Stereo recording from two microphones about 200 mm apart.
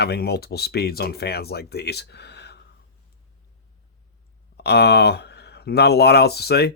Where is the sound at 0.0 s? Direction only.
55° left (ahead or behind).